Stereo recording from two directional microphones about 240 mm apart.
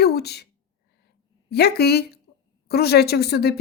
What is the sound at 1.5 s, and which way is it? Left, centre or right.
Speech, left.